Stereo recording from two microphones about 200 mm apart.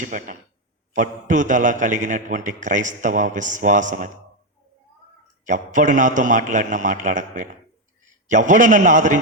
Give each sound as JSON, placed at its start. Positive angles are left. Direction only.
{"t": 0.0, "sound": "a man's voice", "side_deg": -40}
{"t": 5.5, "sound": "a man's voice", "side_deg": -40}